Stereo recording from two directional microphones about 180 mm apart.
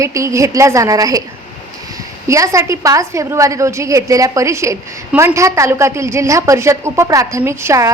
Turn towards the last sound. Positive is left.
turn(degrees=-15)  # may be behind; listen again after turning